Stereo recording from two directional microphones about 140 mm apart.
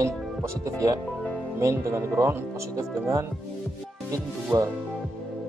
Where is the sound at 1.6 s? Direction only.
20° right (ahead or behind).